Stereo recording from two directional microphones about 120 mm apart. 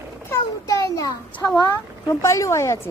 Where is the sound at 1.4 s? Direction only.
30° left (ahead or behind).